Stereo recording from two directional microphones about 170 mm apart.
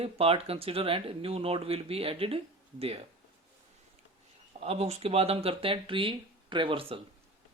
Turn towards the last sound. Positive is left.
turn(degrees=-30)  # may be behind; listen again after turning